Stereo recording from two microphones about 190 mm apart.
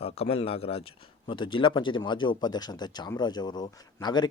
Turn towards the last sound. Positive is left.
turn(degrees=20)  # may be behind; listen again after turning